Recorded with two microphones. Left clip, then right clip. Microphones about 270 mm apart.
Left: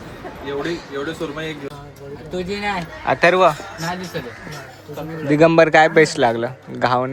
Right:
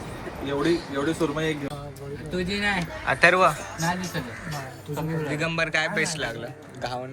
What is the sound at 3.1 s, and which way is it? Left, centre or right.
Speech, centre.